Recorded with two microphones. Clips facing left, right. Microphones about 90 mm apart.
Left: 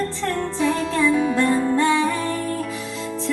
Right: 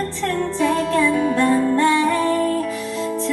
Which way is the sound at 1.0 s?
5° left (ahead or behind).